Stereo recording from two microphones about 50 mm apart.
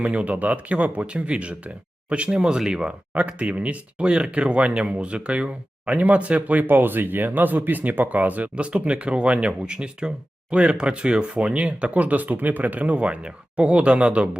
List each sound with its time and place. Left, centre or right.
0.0 s speech: right
6.7 s speech: right